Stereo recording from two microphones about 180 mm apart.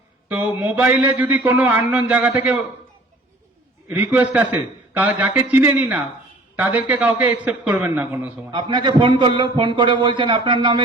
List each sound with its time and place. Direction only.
0.3 s a man's voice: 10° right (ahead or behind)
3.8 s a man's voice: 10° right (ahead or behind)
8.5 s a man's voice: 25° right (ahead or behind)